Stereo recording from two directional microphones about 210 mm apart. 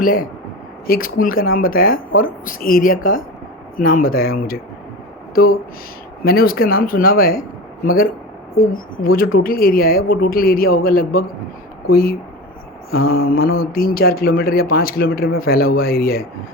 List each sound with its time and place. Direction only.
0.0 s speech: 40° left (ahead or behind)
13.1 s mantra: 75° left (ahead or behind)
13.3 s speech: 45° left (ahead or behind)